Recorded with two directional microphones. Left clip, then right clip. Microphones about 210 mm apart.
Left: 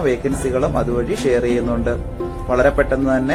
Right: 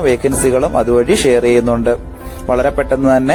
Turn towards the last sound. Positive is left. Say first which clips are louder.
# right 6 dB
turn(degrees=-40)  # may be behind; listen again after turning